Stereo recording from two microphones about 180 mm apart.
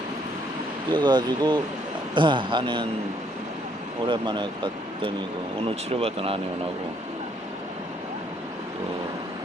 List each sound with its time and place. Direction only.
0.9 s speech: 25° right (ahead or behind)
4.0 s speech: 25° right (ahead or behind)